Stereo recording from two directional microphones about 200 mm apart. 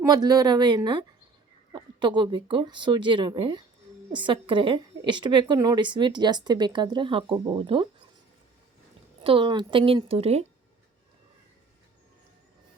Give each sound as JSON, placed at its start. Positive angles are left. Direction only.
{"t": 0.0, "sound": "a woman's voice", "side_deg": -20}
{"t": 9.2, "sound": "a woman's voice", "side_deg": -25}